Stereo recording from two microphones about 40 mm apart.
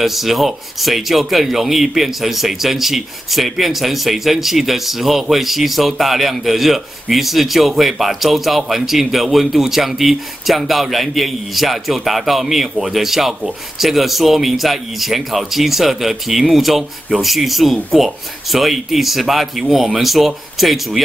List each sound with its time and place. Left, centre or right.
0.0 s speech: centre